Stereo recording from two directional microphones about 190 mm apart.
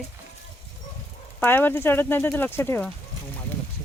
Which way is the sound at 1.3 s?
10° left (ahead or behind).